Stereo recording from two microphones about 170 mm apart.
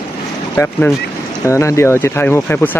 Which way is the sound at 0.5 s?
10° left (ahead or behind).